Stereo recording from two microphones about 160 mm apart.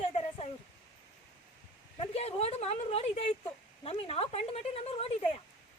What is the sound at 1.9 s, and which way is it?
Speech, 40° left (ahead or behind).